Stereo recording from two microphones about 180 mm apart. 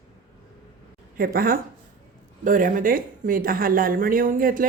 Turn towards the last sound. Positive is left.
turn(degrees=-50)  # may be behind; listen again after turning